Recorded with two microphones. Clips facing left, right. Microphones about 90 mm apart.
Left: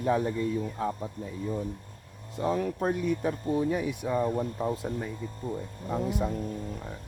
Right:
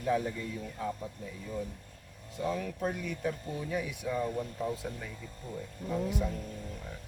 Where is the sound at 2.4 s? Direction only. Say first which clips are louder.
Left 5 dB; 45° left (ahead or behind).